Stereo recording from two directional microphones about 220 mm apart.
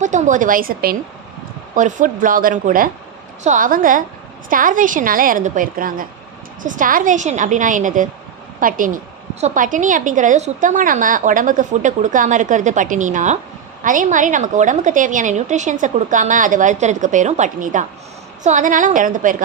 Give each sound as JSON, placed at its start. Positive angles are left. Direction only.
{"t": 0.0, "sound": "a woman's voice", "side_deg": -35}